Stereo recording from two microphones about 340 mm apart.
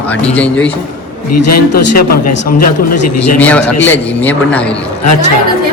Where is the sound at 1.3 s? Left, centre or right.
Left.